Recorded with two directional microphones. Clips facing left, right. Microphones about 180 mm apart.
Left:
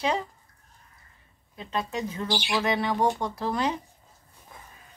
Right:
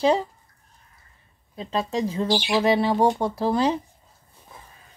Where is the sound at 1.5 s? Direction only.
30° right (ahead or behind).